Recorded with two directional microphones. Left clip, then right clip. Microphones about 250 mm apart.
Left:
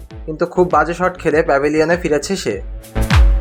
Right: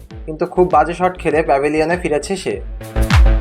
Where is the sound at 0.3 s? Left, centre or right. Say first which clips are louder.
Right 1 dB; centre.